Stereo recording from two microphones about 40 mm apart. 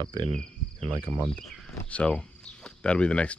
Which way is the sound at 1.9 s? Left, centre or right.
Left.